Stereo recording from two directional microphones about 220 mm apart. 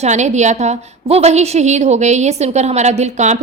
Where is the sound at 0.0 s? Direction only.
30° right (ahead or behind).